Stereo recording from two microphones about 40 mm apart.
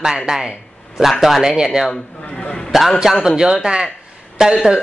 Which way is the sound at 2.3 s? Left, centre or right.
Left.